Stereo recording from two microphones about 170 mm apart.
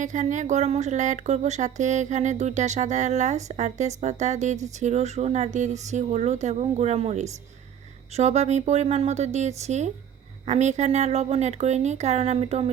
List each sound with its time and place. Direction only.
0.0 s a woman's voice: 45° right (ahead or behind)